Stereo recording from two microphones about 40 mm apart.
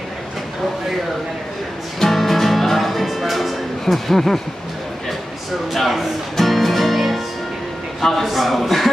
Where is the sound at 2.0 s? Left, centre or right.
Centre.